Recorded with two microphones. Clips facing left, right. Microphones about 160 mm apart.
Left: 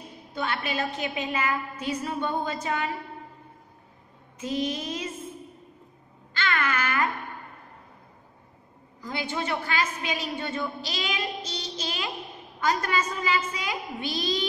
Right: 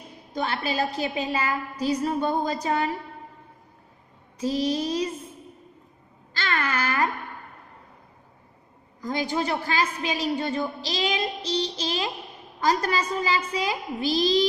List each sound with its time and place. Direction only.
0.3 s a woman's voice: 35° right (ahead or behind)
4.4 s a woman's voice: 35° right (ahead or behind)
6.3 s a sound: 35° right (ahead or behind)
9.0 s a woman's voice: 40° right (ahead or behind)